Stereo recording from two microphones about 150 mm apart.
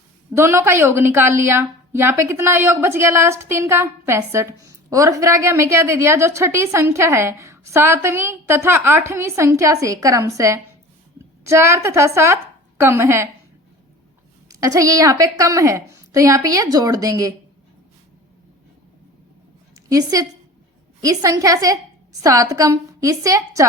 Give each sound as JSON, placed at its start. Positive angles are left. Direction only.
{"t": 0.3, "sound": "a woman's voice", "side_deg": -20}
{"t": 14.4, "sound": "a woman's voice", "side_deg": -20}
{"t": 19.9, "sound": "a woman's voice", "side_deg": -25}